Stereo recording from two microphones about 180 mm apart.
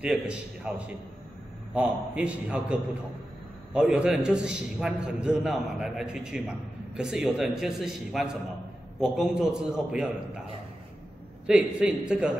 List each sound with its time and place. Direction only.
0.0 s a man's voice: 5° right (ahead or behind)
11.4 s a man's voice: 5° right (ahead or behind)